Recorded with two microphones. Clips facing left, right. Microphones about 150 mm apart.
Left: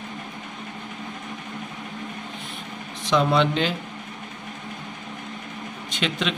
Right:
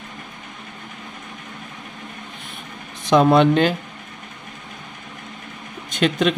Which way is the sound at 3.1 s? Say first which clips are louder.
Right 6 dB; 50° right (ahead or behind).